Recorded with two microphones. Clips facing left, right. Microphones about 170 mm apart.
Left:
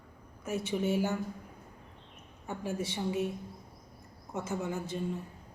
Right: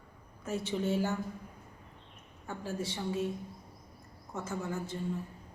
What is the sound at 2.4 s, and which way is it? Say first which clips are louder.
Speech: left 2 dB; 20° left (ahead or behind).